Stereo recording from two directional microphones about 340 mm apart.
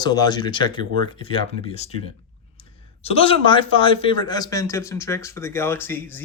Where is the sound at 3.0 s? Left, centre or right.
Centre.